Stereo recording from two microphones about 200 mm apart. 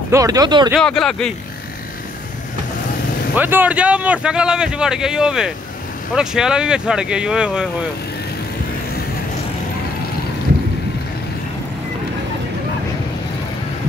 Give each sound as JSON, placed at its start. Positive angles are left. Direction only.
{"t": 0.1, "sound": "speech", "side_deg": -15}
{"t": 0.7, "sound": "speech", "side_deg": 0}
{"t": 3.3, "sound": "speech", "side_deg": -10}